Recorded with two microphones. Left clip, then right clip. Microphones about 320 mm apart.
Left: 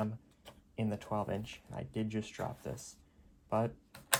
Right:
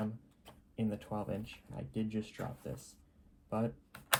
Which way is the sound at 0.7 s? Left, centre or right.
Left.